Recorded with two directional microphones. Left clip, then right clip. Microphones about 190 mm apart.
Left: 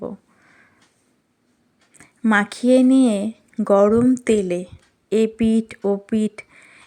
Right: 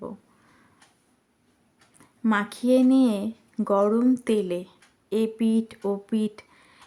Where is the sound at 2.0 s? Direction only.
25° left (ahead or behind).